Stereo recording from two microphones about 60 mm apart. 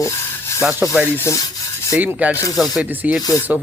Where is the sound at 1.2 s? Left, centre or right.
Left.